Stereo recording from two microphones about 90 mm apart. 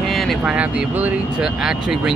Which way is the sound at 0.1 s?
Centre (ahead or behind).